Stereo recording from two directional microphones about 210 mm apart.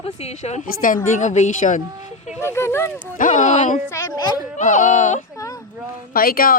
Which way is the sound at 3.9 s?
15° left (ahead or behind).